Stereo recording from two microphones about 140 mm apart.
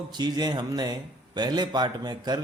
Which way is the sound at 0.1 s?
30° right (ahead or behind).